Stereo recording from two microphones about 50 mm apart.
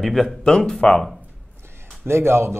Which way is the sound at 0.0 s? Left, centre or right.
Centre.